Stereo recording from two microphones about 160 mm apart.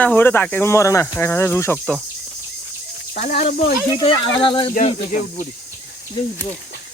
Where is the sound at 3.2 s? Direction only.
50° left (ahead or behind).